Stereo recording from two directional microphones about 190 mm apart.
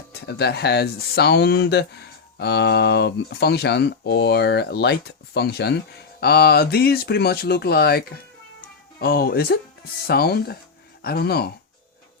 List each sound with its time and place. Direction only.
0.1 s speech: 55° left (ahead or behind)